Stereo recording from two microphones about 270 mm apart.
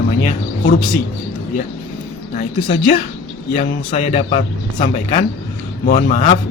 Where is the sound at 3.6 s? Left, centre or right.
Left.